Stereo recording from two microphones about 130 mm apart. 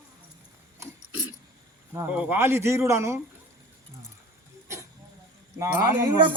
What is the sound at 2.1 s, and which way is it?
Speech, 15° right (ahead or behind).